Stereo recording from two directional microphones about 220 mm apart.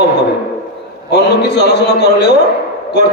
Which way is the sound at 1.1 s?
50° left (ahead or behind).